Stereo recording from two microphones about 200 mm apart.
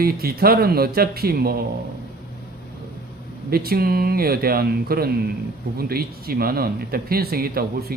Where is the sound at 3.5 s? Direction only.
50° right (ahead or behind).